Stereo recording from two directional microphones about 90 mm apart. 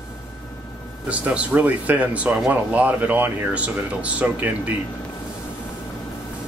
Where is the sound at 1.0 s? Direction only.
15° right (ahead or behind).